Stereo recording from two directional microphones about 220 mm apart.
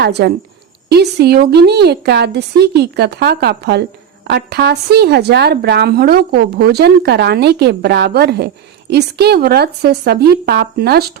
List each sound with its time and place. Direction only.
0.0 s speech: 50° right (ahead or behind)